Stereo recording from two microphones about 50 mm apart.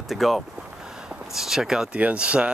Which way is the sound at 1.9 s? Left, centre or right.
Right.